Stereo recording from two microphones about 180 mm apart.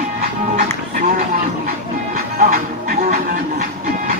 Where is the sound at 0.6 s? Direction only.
50° right (ahead or behind).